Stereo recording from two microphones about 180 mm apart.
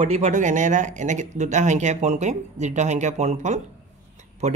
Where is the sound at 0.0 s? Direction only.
45° right (ahead or behind).